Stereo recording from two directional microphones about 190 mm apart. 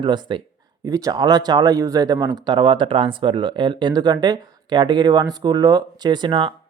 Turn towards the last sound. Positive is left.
turn(degrees=-25)  # may be behind; listen again after turning